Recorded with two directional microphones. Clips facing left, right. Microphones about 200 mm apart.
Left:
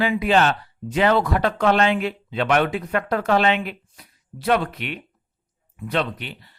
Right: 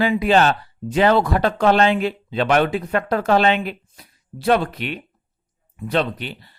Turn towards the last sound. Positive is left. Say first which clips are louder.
# right 3 dB
turn(degrees=-35)  # may be behind; listen again after turning